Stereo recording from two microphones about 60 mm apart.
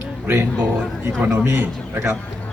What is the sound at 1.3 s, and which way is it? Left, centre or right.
Speech, right.